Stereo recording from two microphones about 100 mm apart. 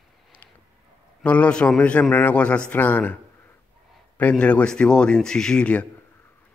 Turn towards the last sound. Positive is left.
turn(degrees=10)  # may be behind; listen again after turning